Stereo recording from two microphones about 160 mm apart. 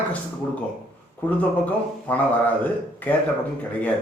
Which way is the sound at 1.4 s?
10° left (ahead or behind).